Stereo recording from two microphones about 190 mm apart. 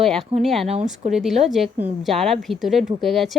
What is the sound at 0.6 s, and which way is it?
Speech, 35° right (ahead or behind).